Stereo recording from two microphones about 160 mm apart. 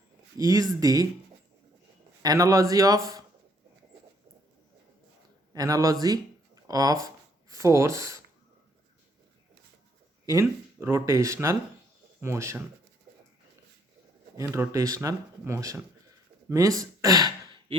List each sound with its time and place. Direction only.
0.3 s speech: 20° right (ahead or behind)
2.2 s speech: 20° right (ahead or behind)
5.5 s speech: 20° right (ahead or behind)
10.2 s speech: 20° right (ahead or behind)
14.3 s speech: 20° right (ahead or behind)